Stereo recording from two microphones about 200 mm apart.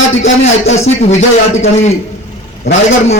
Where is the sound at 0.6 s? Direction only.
35° left (ahead or behind).